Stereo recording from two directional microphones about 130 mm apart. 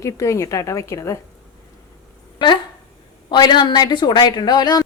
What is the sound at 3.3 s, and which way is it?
A woman's voice, 35° left (ahead or behind).